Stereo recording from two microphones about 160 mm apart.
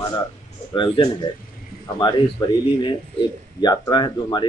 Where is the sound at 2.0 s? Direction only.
25° left (ahead or behind).